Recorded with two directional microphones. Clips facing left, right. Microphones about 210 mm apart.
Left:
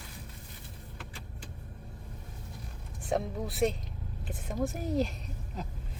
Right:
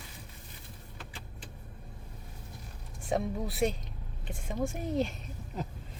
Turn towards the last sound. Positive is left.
turn(degrees=0)  # may be behind; listen again after turning